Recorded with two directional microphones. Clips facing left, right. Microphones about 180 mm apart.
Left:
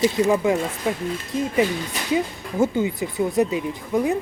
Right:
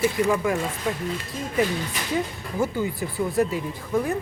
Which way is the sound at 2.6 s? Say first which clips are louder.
Left 4 dB; 20° left (ahead or behind).